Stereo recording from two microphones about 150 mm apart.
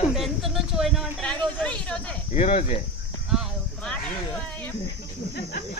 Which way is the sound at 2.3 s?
45° left (ahead or behind).